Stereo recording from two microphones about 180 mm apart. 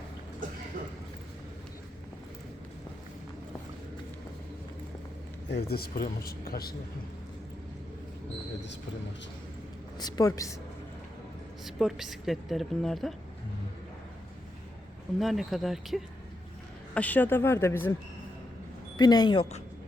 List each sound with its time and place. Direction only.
5.5 s a man's voice: 65° left (ahead or behind)
10.0 s speech: 20° left (ahead or behind)
11.6 s a woman's voice: centre (ahead or behind)
15.2 s a woman's voice: centre (ahead or behind)
18.9 s speech: 25° left (ahead or behind)